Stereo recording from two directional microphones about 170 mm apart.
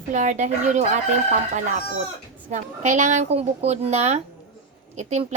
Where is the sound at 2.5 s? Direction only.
45° right (ahead or behind).